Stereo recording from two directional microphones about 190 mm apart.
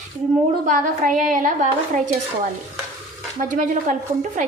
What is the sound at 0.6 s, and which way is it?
A woman's voice, 45° right (ahead or behind).